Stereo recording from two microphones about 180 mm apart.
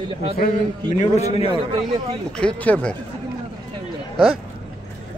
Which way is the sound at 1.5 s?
25° right (ahead or behind).